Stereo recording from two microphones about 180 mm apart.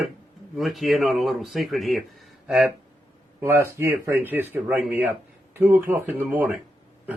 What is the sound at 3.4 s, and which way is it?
A man's voice, 10° right (ahead or behind).